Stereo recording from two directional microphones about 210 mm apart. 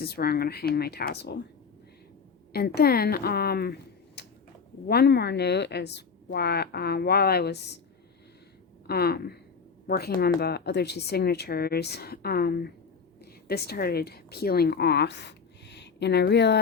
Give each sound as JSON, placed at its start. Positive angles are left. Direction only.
{"t": 0.0, "sound": "speech", "side_deg": 50}
{"t": 2.5, "sound": "speech", "side_deg": 50}
{"t": 8.9, "sound": "a woman's voice", "side_deg": 50}